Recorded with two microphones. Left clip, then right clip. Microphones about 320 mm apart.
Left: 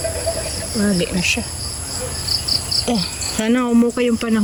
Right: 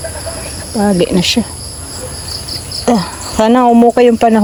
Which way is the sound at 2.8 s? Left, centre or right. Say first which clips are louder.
Right 8 dB; right.